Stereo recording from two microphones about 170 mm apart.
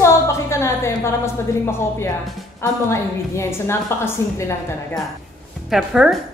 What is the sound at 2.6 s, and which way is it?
A woman's voice, 15° left (ahead or behind).